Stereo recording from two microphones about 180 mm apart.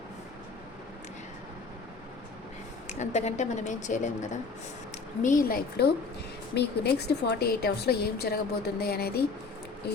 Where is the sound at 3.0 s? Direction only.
40° left (ahead or behind).